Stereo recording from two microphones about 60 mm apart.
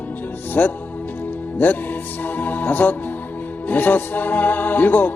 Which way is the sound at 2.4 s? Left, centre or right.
Left.